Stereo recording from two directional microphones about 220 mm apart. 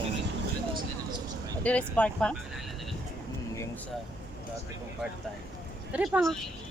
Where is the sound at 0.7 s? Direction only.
20° right (ahead or behind).